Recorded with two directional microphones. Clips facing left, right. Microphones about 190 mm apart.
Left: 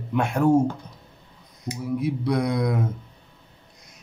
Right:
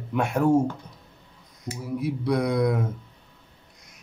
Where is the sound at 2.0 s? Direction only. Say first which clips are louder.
Even; 5° right (ahead or behind).